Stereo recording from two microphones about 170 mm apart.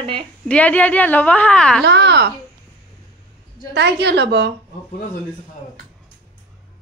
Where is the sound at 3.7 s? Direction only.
85° right.